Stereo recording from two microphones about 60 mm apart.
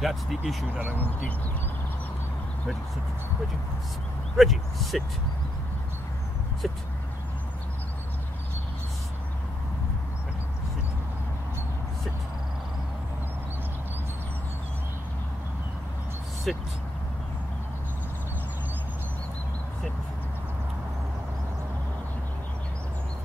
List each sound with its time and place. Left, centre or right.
0.0 s speech: centre
0.7 s speech: right
4.4 s speech: centre
6.6 s speech: centre
16.5 s speech: centre